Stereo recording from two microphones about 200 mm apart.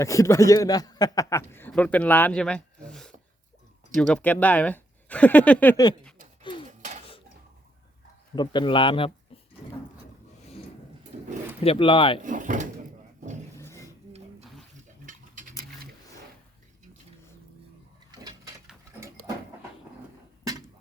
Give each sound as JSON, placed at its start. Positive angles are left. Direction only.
{"t": 0.0, "sound": "a man's voice", "side_deg": 15}
{"t": 6.4, "sound": "gasp", "side_deg": 25}
{"t": 6.7, "sound": "dishes", "side_deg": -35}
{"t": 8.4, "sound": "speech", "side_deg": 25}
{"t": 11.6, "sound": "speech", "side_deg": 25}
{"t": 12.2, "sound": "speech", "side_deg": -40}
{"t": 13.6, "sound": "mechanisms", "side_deg": 15}
{"t": 15.0, "sound": "a sound", "side_deg": -40}
{"t": 18.1, "sound": "a sound", "side_deg": -20}